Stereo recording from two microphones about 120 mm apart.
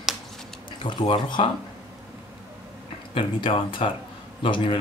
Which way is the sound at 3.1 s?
45° left (ahead or behind).